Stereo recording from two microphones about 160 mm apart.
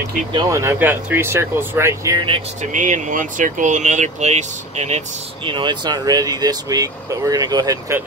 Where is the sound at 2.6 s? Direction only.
50° right (ahead or behind).